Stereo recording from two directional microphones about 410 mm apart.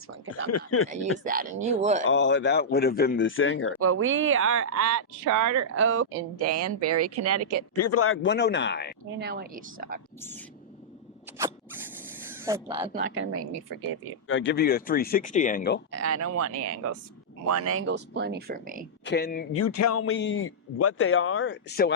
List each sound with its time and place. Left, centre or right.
0.4 s speech: left
1.2 s speech: centre
2.0 s a man's voice: left
3.8 s speech: right
7.8 s a man's voice: left
9.1 s speech: right
10.2 s speech: centre
12.3 s speech: centre
13.0 s speech: right
14.3 s a man's voice: left
15.9 s speech: right
19.0 s a man's voice: left
19.5 s a man's voice: left